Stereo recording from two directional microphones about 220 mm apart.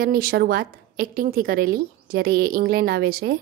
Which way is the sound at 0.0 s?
40° right (ahead or behind).